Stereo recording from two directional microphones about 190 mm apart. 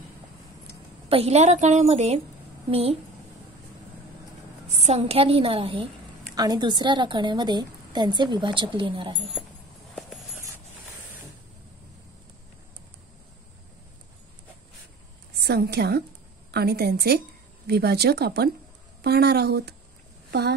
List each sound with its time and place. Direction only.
1.0 s a woman's voice: 30° right (ahead or behind)
4.6 s a woman's voice: 35° right (ahead or behind)
15.3 s a woman's voice: 55° right (ahead or behind)